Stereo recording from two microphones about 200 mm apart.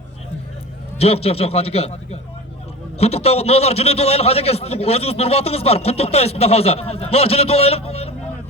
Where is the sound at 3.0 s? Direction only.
30° left (ahead or behind).